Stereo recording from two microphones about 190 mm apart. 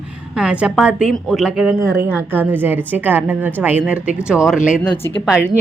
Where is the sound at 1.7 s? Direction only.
10° right (ahead or behind).